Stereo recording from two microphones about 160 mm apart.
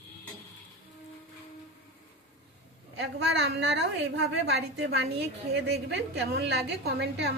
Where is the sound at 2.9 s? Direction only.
90° right.